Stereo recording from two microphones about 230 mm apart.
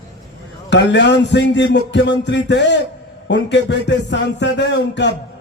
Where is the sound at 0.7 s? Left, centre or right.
Left.